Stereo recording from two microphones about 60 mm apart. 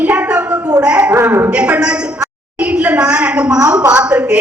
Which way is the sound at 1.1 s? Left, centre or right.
Right.